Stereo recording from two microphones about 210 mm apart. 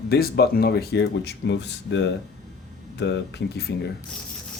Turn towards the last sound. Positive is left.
turn(degrees=55)  # may be behind; listen again after turning